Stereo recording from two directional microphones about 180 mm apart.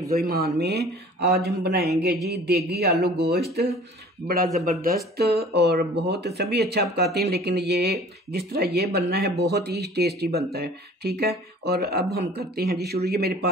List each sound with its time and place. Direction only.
0.1 s speech: 60° right (ahead or behind)